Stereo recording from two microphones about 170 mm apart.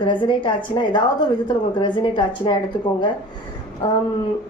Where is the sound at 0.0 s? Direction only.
30° left (ahead or behind).